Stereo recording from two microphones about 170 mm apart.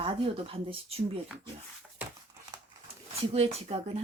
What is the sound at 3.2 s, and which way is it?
Speech, 35° right (ahead or behind).